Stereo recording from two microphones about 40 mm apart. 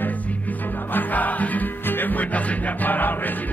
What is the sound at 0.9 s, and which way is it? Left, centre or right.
Music, left.